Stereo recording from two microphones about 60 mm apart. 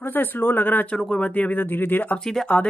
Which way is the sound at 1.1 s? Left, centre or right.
Left.